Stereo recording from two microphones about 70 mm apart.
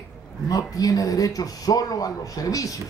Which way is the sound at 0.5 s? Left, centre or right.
Left.